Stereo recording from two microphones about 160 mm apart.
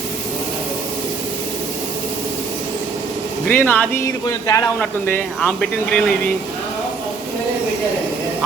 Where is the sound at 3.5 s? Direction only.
10° left (ahead or behind).